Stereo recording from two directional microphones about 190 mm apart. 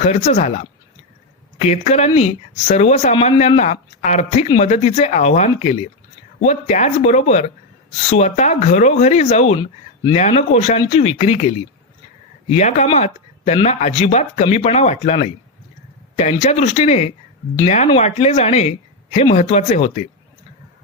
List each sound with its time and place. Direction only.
0.1 s speech: 35° left (ahead or behind)
9.6 s speech: 25° left (ahead or behind)
10.2 s speech: 35° left (ahead or behind)